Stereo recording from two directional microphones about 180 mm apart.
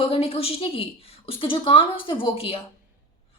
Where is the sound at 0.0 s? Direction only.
30° left (ahead or behind).